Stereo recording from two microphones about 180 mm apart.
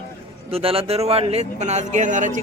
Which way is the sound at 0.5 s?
30° right (ahead or behind).